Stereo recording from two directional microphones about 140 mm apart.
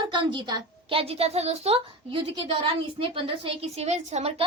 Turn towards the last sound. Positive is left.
turn(degrees=-50)  # may be behind; listen again after turning